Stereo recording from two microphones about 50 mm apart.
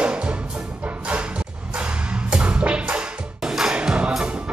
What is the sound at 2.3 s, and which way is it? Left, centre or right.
Music, right.